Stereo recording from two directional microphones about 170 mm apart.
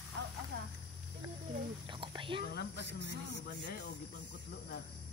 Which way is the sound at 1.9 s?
30° right (ahead or behind).